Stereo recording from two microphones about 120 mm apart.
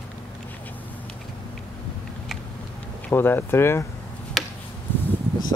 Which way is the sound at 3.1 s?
20° left (ahead or behind).